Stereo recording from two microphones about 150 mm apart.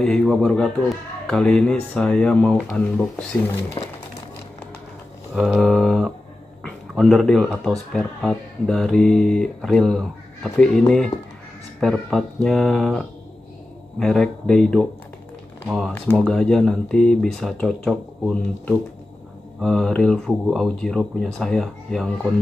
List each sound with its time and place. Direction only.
0.0 s speech: 5° left (ahead or behind)
3.8 s speech: 30° left (ahead or behind)
5.3 s speech: centre (ahead or behind)
15.9 s speech: 5° left (ahead or behind)